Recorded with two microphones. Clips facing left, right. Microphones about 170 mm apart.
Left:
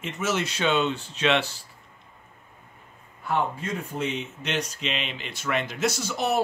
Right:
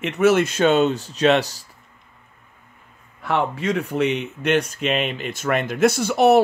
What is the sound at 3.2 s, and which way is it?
Speech, 85° right.